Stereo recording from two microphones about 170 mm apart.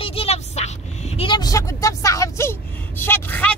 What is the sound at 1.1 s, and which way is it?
Vehicle, 30° left (ahead or behind).